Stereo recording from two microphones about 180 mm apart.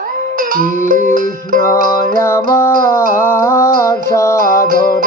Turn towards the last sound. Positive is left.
turn(degrees=15)  # may be behind; listen again after turning